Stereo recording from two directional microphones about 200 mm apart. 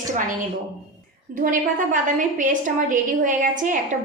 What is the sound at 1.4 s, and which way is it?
A woman's voice, 40° right (ahead or behind).